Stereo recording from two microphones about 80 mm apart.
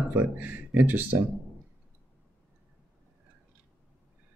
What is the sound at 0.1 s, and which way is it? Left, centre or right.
Speech, right.